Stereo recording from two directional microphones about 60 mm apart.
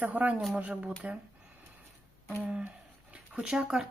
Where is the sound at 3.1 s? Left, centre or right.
Right.